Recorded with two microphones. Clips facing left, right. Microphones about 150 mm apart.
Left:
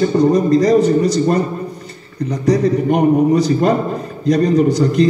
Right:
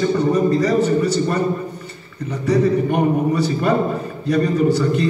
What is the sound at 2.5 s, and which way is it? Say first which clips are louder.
A man's voice: left 2 dB; 40° left (ahead or behind).